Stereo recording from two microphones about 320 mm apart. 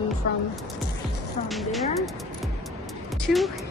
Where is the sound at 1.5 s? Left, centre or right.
Centre.